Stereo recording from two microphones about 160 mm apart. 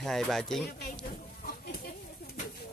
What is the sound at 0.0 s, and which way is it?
Speech, centre (ahead or behind).